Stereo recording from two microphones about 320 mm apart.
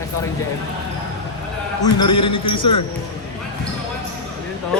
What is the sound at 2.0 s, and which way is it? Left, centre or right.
Speech, centre.